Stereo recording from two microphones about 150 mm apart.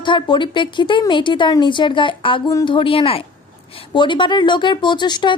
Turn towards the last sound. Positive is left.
turn(degrees=30)  # may be behind; listen again after turning